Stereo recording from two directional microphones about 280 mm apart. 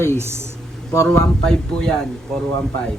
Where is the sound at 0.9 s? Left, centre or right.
Centre.